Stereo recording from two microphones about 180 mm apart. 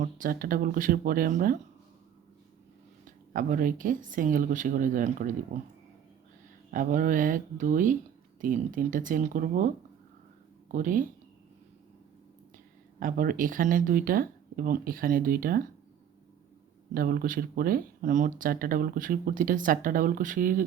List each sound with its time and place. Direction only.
0.0 s speech: 50° right (ahead or behind)
3.3 s speech: 50° right (ahead or behind)
6.7 s speech: 50° right (ahead or behind)
13.0 s speech: 50° right (ahead or behind)
16.9 s speech: 55° right (ahead or behind)